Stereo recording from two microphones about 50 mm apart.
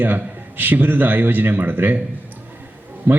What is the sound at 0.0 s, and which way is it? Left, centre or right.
A man's voice, right.